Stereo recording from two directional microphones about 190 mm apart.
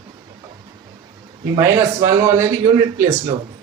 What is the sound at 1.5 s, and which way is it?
A man's voice, 20° right (ahead or behind).